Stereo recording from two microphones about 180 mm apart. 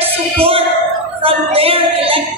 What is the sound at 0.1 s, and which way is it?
Music, 30° right (ahead or behind).